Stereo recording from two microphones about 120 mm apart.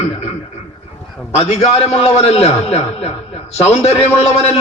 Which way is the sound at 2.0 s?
60° left (ahead or behind).